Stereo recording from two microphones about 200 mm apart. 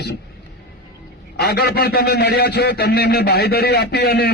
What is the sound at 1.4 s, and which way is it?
A man's voice, 55° left (ahead or behind).